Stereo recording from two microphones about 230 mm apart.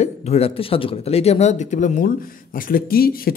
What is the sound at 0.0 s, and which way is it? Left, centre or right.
Speech, left.